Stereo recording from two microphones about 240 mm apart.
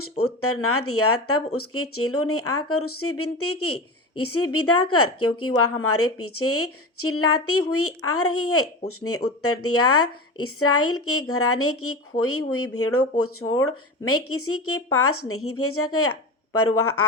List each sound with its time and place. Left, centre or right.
0.4 s a woman's voice: left